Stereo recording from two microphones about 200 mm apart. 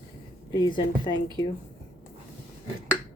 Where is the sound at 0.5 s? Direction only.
20° left (ahead or behind).